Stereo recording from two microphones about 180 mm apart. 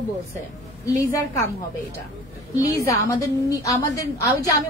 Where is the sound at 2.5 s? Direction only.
20° left (ahead or behind).